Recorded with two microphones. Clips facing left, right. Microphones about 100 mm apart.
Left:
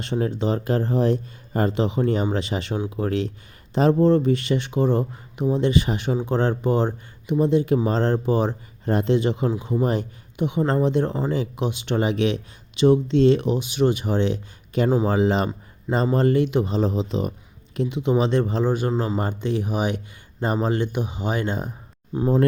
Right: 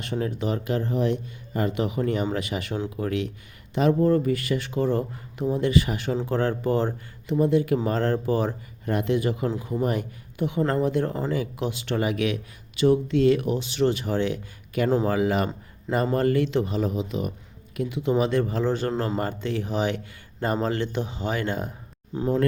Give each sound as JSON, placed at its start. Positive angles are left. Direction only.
{"t": 0.0, "sound": "speech", "side_deg": 30}